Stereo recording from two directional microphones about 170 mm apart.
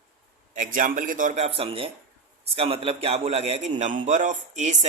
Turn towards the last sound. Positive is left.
turn(degrees=-45)  # may be behind; listen again after turning